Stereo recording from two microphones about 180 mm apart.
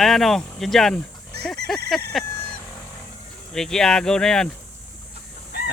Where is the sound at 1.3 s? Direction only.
65° right (ahead or behind).